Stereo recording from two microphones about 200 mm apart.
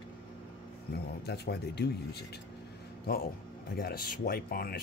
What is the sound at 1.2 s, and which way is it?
Speech, 55° left (ahead or behind).